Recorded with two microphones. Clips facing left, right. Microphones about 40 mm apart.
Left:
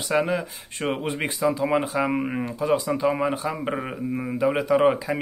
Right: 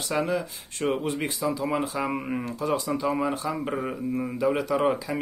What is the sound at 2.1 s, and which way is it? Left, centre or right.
Speech, centre.